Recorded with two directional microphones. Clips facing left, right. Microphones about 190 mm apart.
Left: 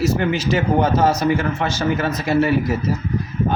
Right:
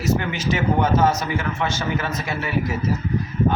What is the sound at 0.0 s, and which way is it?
Speech, 30° left (ahead or behind).